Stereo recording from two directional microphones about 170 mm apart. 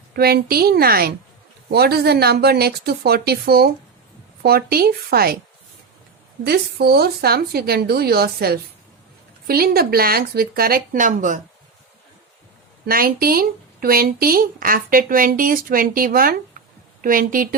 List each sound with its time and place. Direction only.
0.1 s a woman's voice: 65° right (ahead or behind)
6.4 s a woman's voice: 70° right (ahead or behind); by 11.3 s 45° right (ahead or behind)
12.8 s a woman's voice: 60° right (ahead or behind)